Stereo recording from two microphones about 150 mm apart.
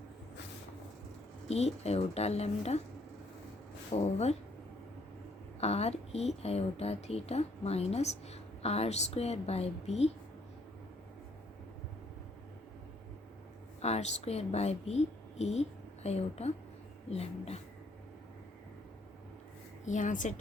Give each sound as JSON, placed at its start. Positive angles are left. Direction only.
{"t": 1.5, "sound": "a woman's voice", "side_deg": 45}
{"t": 3.9, "sound": "a woman's voice", "side_deg": 45}
{"t": 5.5, "sound": "a woman's voice", "side_deg": 45}
{"t": 13.8, "sound": "a woman's voice", "side_deg": 45}
{"t": 19.8, "sound": "speech", "side_deg": 55}